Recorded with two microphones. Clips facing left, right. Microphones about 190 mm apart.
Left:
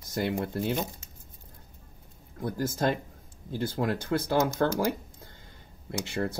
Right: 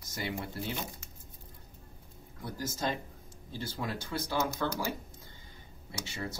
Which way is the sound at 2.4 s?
55° left (ahead or behind).